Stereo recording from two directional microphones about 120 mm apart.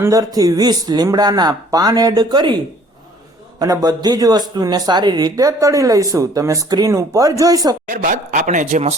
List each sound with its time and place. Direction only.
0.0 s speech: 30° right (ahead or behind)
3.6 s speech: 30° right (ahead or behind)
8.0 s a man's voice: 90° right